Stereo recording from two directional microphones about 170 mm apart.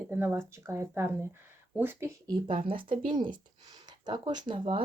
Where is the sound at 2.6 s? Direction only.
30° right (ahead or behind).